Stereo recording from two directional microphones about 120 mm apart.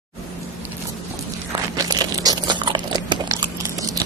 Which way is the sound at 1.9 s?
35° right (ahead or behind).